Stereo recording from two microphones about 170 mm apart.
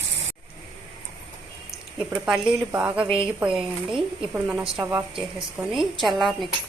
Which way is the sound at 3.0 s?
30° right (ahead or behind).